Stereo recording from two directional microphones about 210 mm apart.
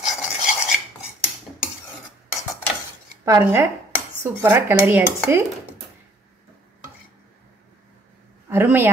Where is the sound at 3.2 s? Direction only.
15° right (ahead or behind).